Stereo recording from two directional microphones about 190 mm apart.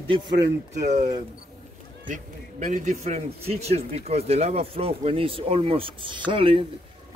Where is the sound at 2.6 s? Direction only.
40° right (ahead or behind).